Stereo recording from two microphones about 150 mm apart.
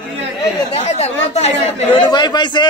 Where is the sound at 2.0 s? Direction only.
30° left (ahead or behind).